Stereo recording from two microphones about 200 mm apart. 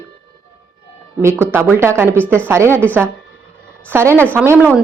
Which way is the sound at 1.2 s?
10° right (ahead or behind).